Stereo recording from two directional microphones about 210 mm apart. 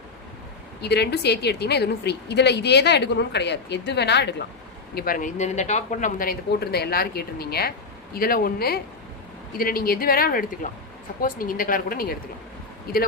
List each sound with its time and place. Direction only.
0.8 s a woman's voice: 50° left (ahead or behind)
4.9 s a woman's voice: 40° left (ahead or behind)